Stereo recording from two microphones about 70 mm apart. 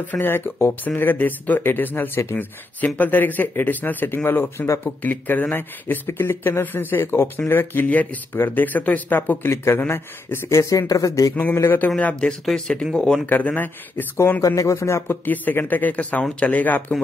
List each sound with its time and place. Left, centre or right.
0.0 s speech: left
11.5 s speech: left
12.0 s speech: centre
12.4 s speech: centre
13.3 s speech: left
14.4 s speech: left
15.2 s speech: left